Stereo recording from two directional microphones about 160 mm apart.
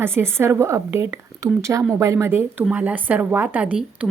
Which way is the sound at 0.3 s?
15° right (ahead or behind).